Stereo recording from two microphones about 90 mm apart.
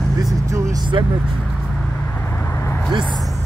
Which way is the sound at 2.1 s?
25° left (ahead or behind).